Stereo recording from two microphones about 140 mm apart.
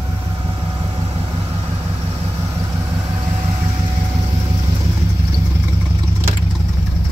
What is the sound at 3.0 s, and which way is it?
Vehicle, 30° right (ahead or behind).